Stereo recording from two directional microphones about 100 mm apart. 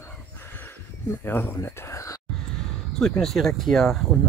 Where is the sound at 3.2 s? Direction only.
5° left (ahead or behind).